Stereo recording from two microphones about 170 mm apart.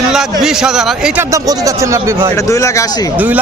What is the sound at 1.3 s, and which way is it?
Speech, 20° right (ahead or behind).